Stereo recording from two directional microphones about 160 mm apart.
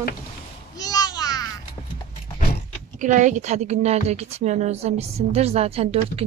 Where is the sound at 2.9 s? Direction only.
50° right (ahead or behind).